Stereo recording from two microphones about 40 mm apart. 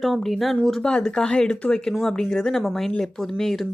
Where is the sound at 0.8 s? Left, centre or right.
Left.